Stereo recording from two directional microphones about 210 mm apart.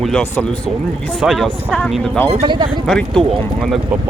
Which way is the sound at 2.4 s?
20° right (ahead or behind).